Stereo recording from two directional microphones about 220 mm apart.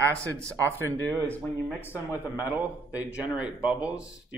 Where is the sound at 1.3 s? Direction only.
5° left (ahead or behind).